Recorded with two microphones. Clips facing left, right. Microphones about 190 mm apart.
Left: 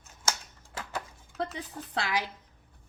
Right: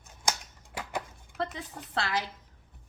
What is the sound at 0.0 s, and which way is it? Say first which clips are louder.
Typewriter: right 1 dB; 15° right (ahead or behind).